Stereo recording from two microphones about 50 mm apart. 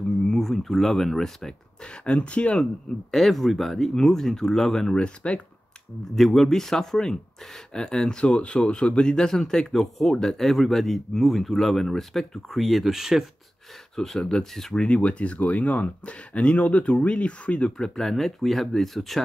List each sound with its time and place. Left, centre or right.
0.2 s speech: centre
2.0 s speech: left
3.1 s speech: centre
4.9 s speech: left
6.1 s speech: centre
13.9 s speech: centre
14.8 s speech: left
17.7 s speech: centre